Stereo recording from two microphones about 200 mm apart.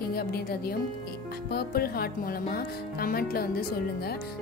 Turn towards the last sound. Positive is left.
turn(degrees=50)  # may be behind; listen again after turning